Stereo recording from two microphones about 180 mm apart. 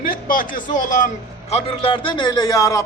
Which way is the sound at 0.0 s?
50° left (ahead or behind).